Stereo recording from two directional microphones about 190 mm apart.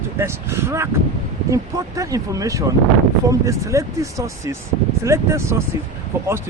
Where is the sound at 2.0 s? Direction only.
15° right (ahead or behind).